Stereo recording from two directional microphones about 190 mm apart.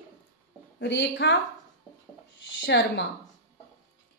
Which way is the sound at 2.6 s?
65° left (ahead or behind).